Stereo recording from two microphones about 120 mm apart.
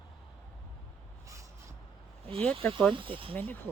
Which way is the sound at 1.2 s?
25° right (ahead or behind).